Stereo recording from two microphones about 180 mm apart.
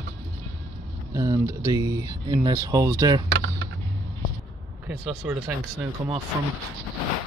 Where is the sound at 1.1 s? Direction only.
20° right (ahead or behind).